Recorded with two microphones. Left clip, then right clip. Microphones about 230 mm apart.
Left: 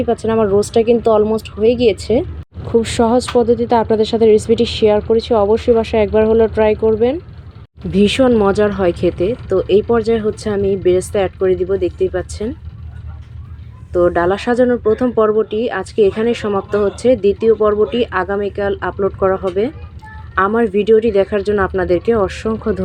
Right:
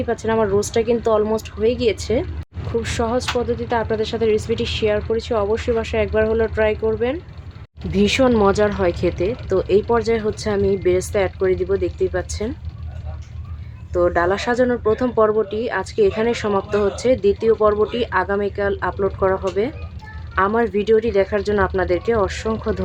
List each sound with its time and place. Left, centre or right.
0.0 s speech: centre
13.9 s speech: centre